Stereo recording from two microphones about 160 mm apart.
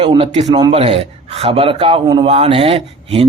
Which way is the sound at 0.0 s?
35° right (ahead or behind).